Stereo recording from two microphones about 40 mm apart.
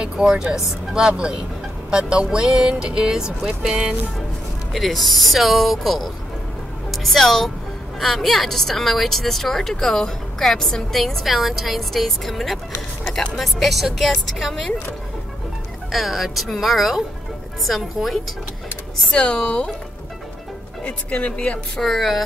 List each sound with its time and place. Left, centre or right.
0.0 s speech: right
4.7 s a woman's voice: centre
15.9 s a woman's voice: centre
19.1 s speech: left
20.8 s speech: left
21.8 s a woman's voice: centre